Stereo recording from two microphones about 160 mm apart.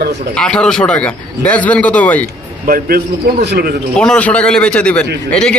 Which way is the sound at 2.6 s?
70° right (ahead or behind).